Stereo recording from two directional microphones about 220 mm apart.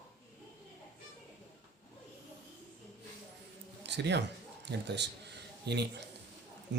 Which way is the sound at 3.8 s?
50° right (ahead or behind).